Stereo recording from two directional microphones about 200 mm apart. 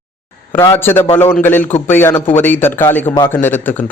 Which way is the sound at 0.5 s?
10° left (ahead or behind).